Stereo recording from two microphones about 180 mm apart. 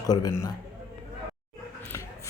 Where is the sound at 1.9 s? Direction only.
15° left (ahead or behind).